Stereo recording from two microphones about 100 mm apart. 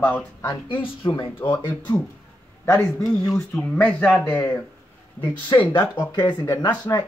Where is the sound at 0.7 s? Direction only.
60° left (ahead or behind).